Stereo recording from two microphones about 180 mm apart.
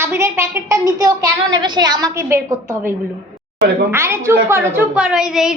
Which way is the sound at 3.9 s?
15° right (ahead or behind).